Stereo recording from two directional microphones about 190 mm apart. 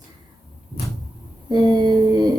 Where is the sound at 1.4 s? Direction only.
20° right (ahead or behind).